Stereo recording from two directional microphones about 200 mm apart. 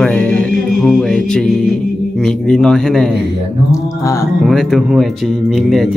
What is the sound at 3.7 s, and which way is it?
Speech, 15° left (ahead or behind).